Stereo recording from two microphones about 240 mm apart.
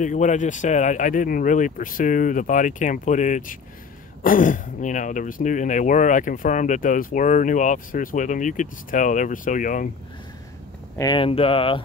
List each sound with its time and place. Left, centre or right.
0.0 s speech: left
11.0 s speech: centre